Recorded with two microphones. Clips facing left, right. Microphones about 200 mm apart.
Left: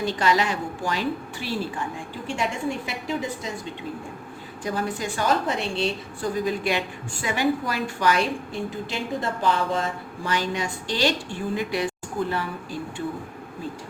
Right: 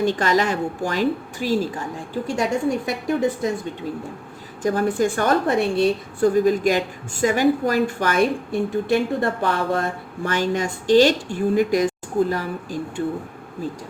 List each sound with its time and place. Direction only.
0.0 s a woman's voice: 45° right (ahead or behind)
3.1 s a woman's voice: 55° right (ahead or behind)
4.6 s a woman's voice: 50° right (ahead or behind)